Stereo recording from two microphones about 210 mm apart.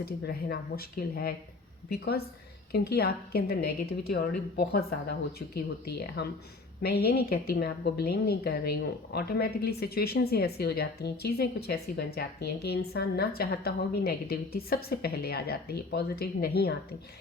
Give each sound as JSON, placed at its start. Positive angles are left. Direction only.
{"t": 0.0, "sound": "a woman's voice", "side_deg": 45}